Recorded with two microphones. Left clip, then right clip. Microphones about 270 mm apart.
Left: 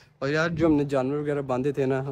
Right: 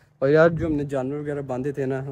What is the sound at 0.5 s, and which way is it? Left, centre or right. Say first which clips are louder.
Speech: left 4 dB; left.